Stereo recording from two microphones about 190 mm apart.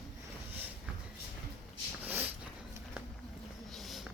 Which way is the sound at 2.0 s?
10° right (ahead or behind).